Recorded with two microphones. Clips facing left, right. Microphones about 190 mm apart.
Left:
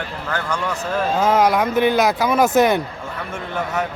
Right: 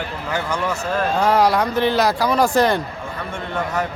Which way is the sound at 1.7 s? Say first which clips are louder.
Left 2 dB; 15° left (ahead or behind).